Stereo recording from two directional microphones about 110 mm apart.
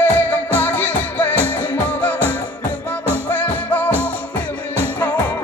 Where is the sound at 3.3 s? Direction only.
15° left (ahead or behind).